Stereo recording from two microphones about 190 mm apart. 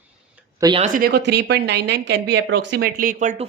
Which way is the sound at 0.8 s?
45° right (ahead or behind).